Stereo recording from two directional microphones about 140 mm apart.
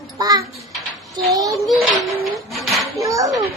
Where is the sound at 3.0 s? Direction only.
25° right (ahead or behind).